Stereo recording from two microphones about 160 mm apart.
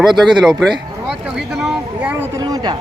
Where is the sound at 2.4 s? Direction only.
30° right (ahead or behind).